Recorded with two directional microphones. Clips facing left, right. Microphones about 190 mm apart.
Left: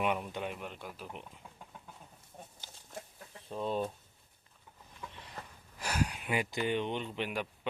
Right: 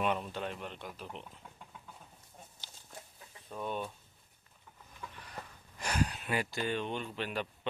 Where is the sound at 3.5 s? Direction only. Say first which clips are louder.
Left 4 dB; 30° left (ahead or behind).